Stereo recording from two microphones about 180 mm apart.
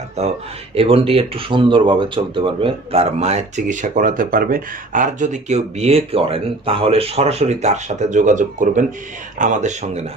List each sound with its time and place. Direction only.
0.2 s speech: 35° right (ahead or behind)